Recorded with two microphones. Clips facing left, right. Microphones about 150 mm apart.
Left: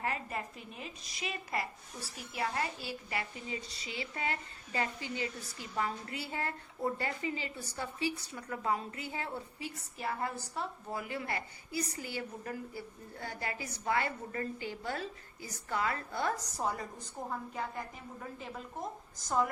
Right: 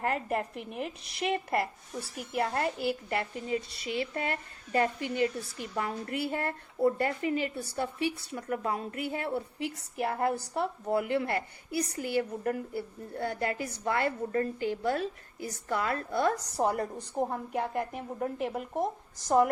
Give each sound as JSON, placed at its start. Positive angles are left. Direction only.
{"t": 0.0, "sound": "a woman's voice", "side_deg": -60}